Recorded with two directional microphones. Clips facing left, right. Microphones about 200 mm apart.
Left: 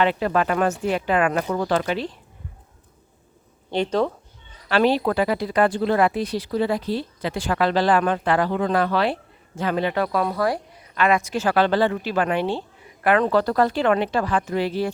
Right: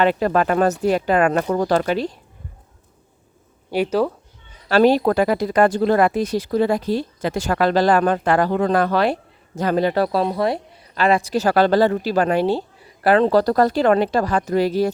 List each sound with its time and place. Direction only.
0.0 s speech: 45° right (ahead or behind)
3.7 s speech: 10° right (ahead or behind)
4.7 s speech: 45° right (ahead or behind)